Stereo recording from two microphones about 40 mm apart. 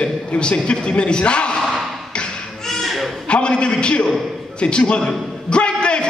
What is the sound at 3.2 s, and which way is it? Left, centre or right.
A man's voice, left.